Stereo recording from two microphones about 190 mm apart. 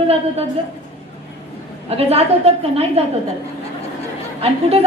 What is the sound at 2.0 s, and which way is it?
A woman's voice, 30° right (ahead or behind).